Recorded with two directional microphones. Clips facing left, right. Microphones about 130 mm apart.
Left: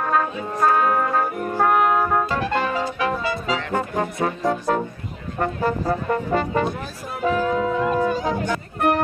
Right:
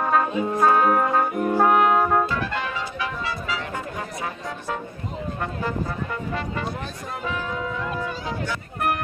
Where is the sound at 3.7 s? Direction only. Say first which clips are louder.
Left 7 dB; 60° left (ahead or behind).